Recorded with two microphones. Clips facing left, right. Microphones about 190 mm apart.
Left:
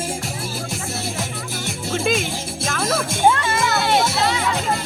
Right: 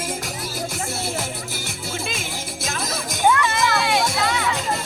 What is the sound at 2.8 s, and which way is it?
Music, 30° left (ahead or behind).